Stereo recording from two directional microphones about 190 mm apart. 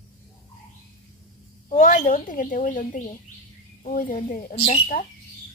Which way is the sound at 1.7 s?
40° left (ahead or behind).